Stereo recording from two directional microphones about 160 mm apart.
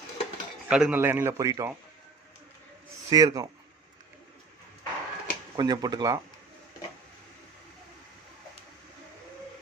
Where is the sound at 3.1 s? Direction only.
20° right (ahead or behind).